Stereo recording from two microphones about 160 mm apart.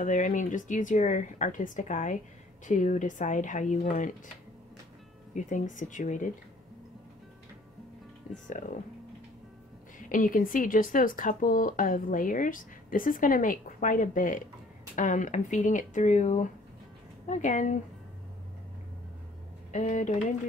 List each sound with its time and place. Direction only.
0.0 s speech: 55° left (ahead or behind)
5.3 s speech: 50° left (ahead or behind)
8.5 s speech: 50° left (ahead or behind)
9.9 s speech: 55° left (ahead or behind)
19.7 s speech: 50° left (ahead or behind)